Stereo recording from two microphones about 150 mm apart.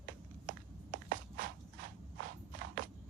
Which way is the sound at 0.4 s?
65° right (ahead or behind).